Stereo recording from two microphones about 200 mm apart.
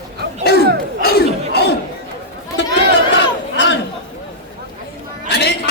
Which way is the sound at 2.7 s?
55° right (ahead or behind).